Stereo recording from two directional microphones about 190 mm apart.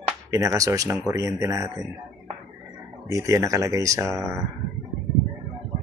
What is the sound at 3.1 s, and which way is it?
Speech, 15° right (ahead or behind).